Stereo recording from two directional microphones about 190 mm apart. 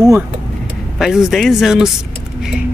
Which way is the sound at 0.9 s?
Centre (ahead or behind).